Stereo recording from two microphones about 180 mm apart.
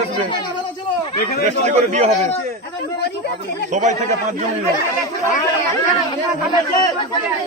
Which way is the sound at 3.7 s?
40° right (ahead or behind).